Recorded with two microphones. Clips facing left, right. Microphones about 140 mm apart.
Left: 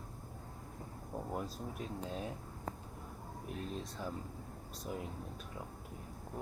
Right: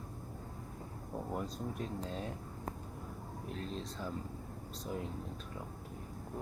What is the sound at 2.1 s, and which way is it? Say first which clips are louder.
Speech: even; 10° left (ahead or behind).